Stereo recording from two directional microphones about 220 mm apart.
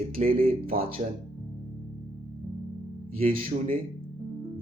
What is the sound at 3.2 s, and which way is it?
Speech, 40° right (ahead or behind).